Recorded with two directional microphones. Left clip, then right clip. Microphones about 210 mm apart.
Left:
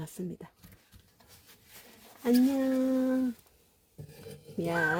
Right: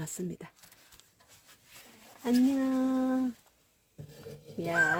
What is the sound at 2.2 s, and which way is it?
Speech, 40° left (ahead or behind).